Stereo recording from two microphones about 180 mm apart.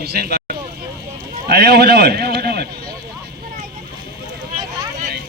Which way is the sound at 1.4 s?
65° right (ahead or behind).